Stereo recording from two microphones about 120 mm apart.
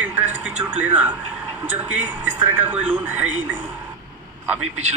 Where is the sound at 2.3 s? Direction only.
20° right (ahead or behind).